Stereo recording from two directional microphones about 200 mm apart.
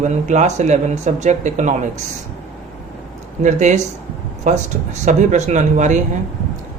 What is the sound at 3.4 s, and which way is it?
Speech, 35° right (ahead or behind).